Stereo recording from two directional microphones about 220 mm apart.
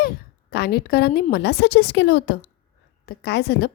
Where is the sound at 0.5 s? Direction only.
45° left (ahead or behind).